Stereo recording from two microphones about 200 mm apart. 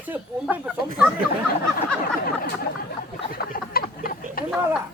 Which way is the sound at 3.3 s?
50° left (ahead or behind).